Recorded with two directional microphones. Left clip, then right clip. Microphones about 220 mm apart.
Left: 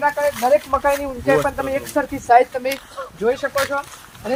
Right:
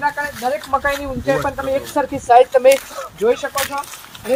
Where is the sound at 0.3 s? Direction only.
25° left (ahead or behind).